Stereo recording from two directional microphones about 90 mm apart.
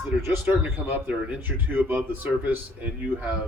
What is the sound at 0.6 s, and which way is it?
A man's voice, 20° right (ahead or behind).